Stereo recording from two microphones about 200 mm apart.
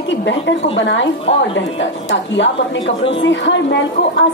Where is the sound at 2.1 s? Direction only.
65° left (ahead or behind).